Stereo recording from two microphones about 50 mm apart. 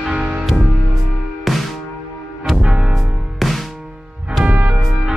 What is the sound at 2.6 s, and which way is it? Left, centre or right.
Music, centre.